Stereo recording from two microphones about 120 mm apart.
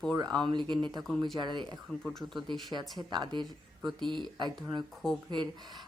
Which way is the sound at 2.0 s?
5° left (ahead or behind).